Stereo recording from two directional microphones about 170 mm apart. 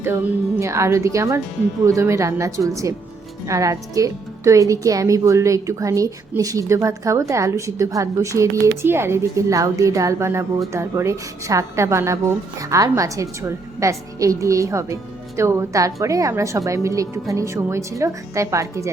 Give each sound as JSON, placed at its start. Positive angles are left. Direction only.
{"t": 0.6, "sound": "a woman's voice", "side_deg": -15}